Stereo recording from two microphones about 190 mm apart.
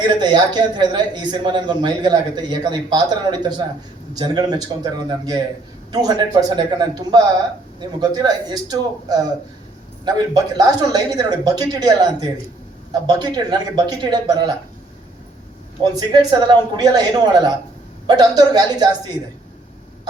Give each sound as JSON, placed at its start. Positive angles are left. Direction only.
{"t": 0.2, "sound": "a man's voice", "side_deg": -25}
{"t": 4.1, "sound": "a man's voice", "side_deg": -20}
{"t": 15.8, "sound": "a man's voice", "side_deg": -20}